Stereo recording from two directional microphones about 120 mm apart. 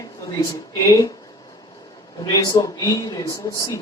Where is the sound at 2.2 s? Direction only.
35° left (ahead or behind).